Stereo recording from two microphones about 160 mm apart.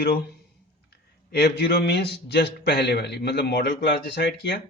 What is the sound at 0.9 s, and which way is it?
A man's voice, 85° left.